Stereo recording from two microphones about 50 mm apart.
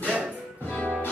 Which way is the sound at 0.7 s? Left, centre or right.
Left.